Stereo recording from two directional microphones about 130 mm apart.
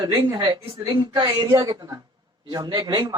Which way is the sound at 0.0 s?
25° right (ahead or behind).